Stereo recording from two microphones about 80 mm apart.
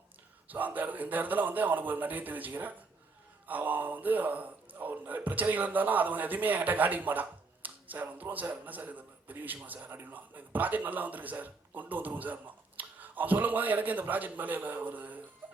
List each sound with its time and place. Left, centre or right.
0.4 s a man's voice: right